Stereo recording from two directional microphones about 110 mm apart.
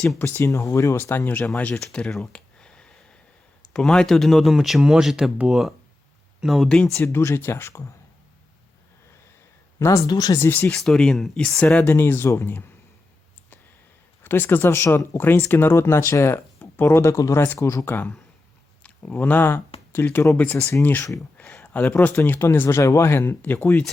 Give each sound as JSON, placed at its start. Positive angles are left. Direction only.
{"t": 0.2, "sound": "speech", "side_deg": 20}
{"t": 6.9, "sound": "speech", "side_deg": 20}
{"t": 9.7, "sound": "speech", "side_deg": 25}
{"t": 10.4, "sound": "a man's voice", "side_deg": 15}
{"t": 10.8, "sound": "a man's voice", "side_deg": 5}
{"t": 14.3, "sound": "a man's voice", "side_deg": 20}